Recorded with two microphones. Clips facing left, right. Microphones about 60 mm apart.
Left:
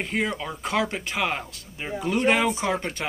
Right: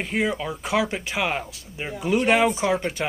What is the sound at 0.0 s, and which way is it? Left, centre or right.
Speech, centre.